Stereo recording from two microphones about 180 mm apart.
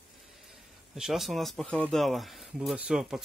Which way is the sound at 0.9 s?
Centre (ahead or behind).